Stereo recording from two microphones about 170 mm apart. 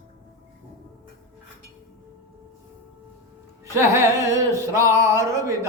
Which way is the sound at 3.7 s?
15° right (ahead or behind).